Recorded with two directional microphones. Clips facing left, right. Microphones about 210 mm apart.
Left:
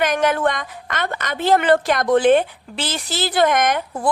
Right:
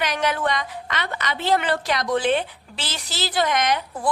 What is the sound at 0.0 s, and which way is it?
A woman's voice, 50° left (ahead or behind).